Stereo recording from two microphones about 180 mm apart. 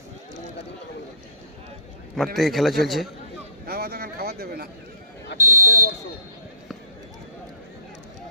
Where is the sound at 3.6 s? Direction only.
60° right (ahead or behind).